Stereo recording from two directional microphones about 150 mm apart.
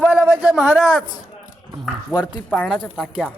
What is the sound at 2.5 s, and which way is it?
Speech, 10° left (ahead or behind).